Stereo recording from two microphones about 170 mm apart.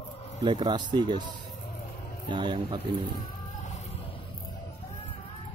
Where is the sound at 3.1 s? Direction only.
45° left (ahead or behind).